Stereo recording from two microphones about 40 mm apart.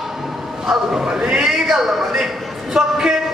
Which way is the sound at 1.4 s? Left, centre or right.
Centre.